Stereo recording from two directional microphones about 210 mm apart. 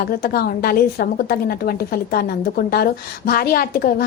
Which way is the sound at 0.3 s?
45° left (ahead or behind).